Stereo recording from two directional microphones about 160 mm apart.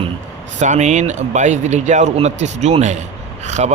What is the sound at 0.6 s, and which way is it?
Speech, 45° right (ahead or behind).